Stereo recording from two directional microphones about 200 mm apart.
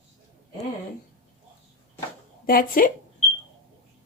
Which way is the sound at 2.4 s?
45° left (ahead or behind).